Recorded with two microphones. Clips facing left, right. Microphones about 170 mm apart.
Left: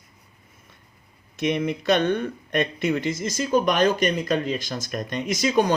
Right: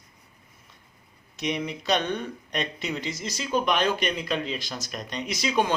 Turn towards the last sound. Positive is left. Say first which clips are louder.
# left 5 dB
turn(degrees=45)  # may be behind; listen again after turning